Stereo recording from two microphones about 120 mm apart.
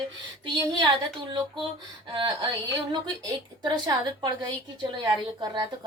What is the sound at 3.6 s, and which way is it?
A woman's voice, 35° right (ahead or behind).